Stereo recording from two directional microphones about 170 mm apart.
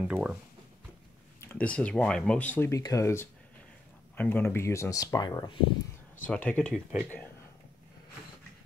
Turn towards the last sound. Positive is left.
turn(degrees=5)  # may be behind; listen again after turning